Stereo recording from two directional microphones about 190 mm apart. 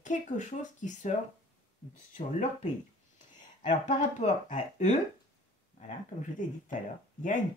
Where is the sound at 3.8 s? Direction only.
40° left (ahead or behind).